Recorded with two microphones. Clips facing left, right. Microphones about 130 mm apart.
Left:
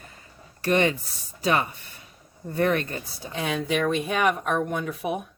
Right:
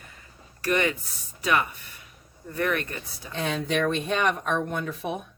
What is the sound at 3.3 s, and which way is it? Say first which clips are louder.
Speech: left 1 dB; centre (ahead or behind).